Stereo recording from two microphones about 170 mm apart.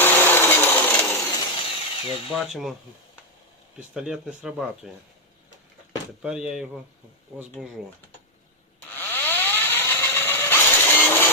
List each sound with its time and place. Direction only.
0.0 s sewing machine: 15° left (ahead or behind)
1.5 s tools: 35° left (ahead or behind)
2.3 s speech: centre (ahead or behind)
3.8 s speech: 5° right (ahead or behind)
6.2 s speech: 5° right (ahead or behind)
8.9 s tools: 10° left (ahead or behind)